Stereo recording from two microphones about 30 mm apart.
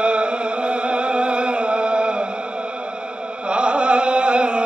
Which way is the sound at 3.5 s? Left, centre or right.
Right.